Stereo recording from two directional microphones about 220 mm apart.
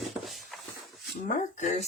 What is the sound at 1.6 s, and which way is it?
Speech, 35° left (ahead or behind).